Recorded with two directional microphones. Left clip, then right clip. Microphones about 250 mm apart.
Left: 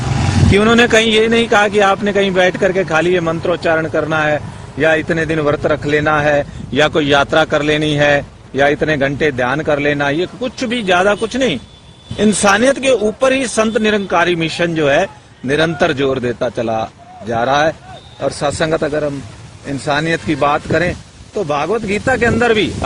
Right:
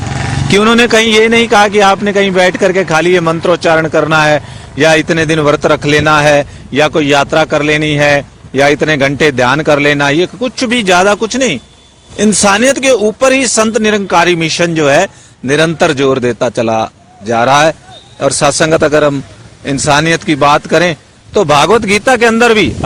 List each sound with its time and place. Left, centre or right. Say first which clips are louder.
0.5 s a man's voice: right 3 dB; centre